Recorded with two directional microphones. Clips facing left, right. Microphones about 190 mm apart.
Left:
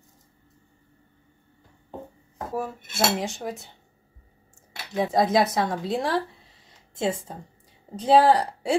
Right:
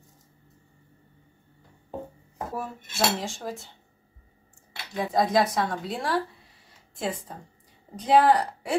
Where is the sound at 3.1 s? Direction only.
20° left (ahead or behind).